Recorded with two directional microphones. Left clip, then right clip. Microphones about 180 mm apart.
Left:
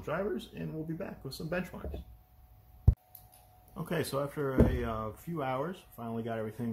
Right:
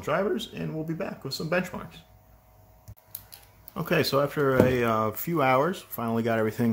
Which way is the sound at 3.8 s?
15° right (ahead or behind).